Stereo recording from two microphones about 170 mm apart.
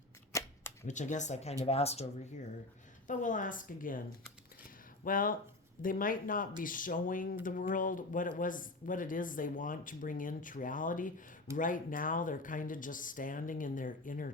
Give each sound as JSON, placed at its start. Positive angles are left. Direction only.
{"t": 0.3, "sound": "cap gun", "side_deg": 15}
{"t": 0.9, "sound": "speech", "side_deg": 45}
{"t": 3.1, "sound": "speech", "side_deg": 50}
{"t": 5.0, "sound": "speech", "side_deg": 55}